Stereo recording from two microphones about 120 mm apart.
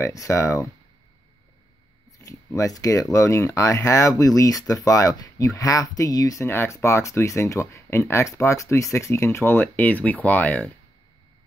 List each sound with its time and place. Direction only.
0.0 s speech: 25° left (ahead or behind)
2.1 s speech: 30° left (ahead or behind)